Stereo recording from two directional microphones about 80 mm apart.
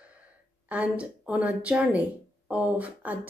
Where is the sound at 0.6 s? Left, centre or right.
Centre.